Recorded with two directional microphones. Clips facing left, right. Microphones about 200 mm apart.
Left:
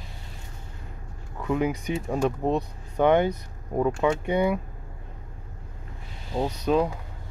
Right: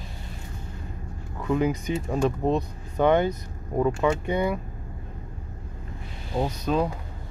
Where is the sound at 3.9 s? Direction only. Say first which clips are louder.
Even; centre (ahead or behind).